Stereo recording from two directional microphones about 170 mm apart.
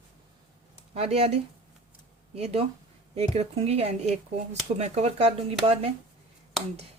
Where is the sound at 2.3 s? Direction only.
35° right (ahead or behind).